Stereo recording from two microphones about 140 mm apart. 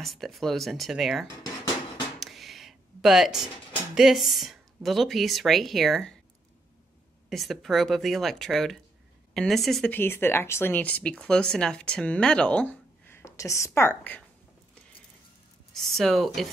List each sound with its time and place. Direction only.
0.0 s speech: centre (ahead or behind)
1.2 s dishes: 25° left (ahead or behind)
2.1 s a sound: centre (ahead or behind)
3.9 s speech: centre (ahead or behind)
7.2 s speech: centre (ahead or behind)
9.9 s speech: 15° left (ahead or behind)
15.7 s speech: centre (ahead or behind)